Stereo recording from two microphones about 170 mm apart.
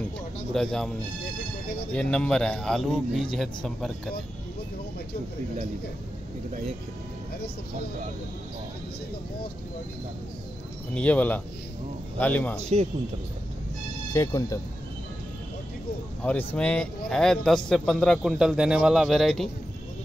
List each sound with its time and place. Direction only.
0.5 s a man's voice: centre (ahead or behind)
10.9 s a man's voice: 5° left (ahead or behind)
14.1 s speech: 20° left (ahead or behind)
16.2 s a man's voice: 10° left (ahead or behind)